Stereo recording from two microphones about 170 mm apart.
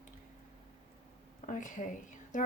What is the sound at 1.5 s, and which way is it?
Speech, 45° left (ahead or behind).